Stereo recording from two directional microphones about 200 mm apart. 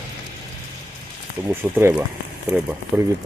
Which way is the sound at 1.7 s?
10° right (ahead or behind).